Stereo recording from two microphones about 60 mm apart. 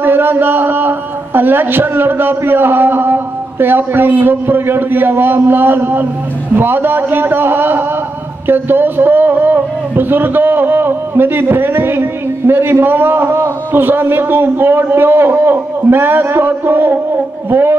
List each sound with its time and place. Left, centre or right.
0.0 s a man's voice: right